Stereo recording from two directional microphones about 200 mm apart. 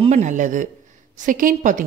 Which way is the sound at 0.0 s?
35° right (ahead or behind).